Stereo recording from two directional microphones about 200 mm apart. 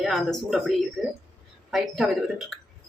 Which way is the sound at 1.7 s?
Centre (ahead or behind).